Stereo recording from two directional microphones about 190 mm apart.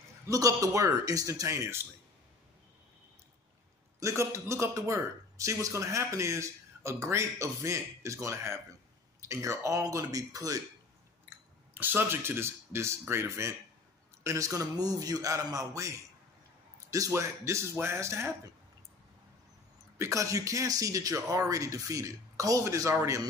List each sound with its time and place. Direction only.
0.3 s a man's voice: 20° right (ahead or behind)
4.0 s a man's voice: 15° right (ahead or behind)
11.7 s a man's voice: 10° right (ahead or behind)
16.9 s a man's voice: 15° right (ahead or behind)
20.0 s a man's voice: 15° right (ahead or behind)